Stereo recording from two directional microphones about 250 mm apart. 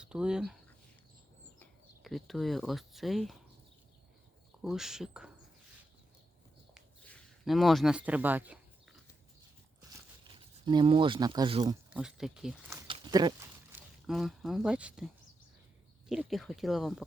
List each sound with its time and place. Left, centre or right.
0.0 s speech: centre
4.6 s speech: centre
6.7 s a sound: centre
10.2 s speech: centre
11.9 s speech: centre
12.9 s sheep: centre
14.1 s speech: centre